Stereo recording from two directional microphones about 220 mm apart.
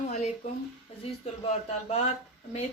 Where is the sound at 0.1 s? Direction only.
30° left (ahead or behind).